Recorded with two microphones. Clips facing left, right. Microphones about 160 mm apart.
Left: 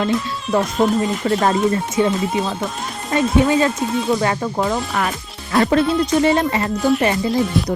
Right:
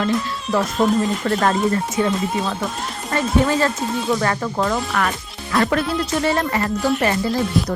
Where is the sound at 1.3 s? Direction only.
20° left (ahead or behind).